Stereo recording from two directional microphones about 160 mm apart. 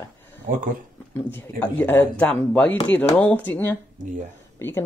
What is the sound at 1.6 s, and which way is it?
Speech, 10° left (ahead or behind).